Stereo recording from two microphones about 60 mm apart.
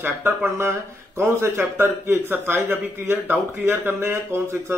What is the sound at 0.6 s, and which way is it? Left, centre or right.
Speech, right.